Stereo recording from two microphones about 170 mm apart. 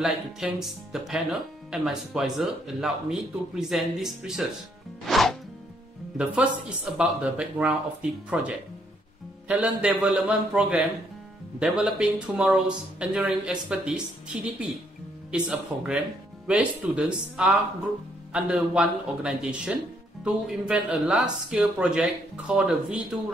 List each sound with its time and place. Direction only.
0.0 s speech: centre (ahead or behind)
5.0 s music: centre (ahead or behind)
6.1 s a man's voice: 5° right (ahead or behind)